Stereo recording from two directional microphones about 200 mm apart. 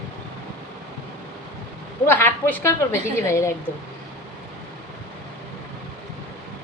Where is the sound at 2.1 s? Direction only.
10° left (ahead or behind).